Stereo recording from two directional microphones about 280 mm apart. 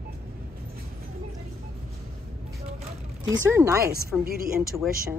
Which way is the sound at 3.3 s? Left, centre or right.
Centre.